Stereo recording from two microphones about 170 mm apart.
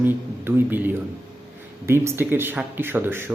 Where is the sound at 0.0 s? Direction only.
10° right (ahead or behind).